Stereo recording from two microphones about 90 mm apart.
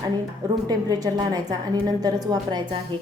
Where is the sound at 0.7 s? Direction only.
45° right (ahead or behind).